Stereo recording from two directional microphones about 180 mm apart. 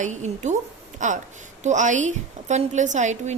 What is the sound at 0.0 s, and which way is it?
A woman's voice, 40° right (ahead or behind).